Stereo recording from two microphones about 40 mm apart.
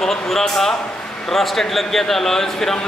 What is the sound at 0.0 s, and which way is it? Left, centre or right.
A man's voice, centre.